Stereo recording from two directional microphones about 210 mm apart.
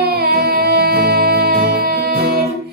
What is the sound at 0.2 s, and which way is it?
Music, 50° right (ahead or behind).